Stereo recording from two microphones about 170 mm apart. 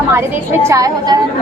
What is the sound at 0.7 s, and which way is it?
Speech, 20° right (ahead or behind).